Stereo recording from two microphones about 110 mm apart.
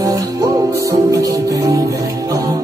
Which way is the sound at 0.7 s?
30° right (ahead or behind).